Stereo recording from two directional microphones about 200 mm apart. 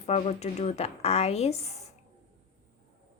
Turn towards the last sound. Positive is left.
turn(degrees=30)  # may be behind; listen again after turning